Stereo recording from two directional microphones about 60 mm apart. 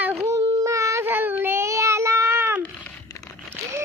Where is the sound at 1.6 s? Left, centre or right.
Right.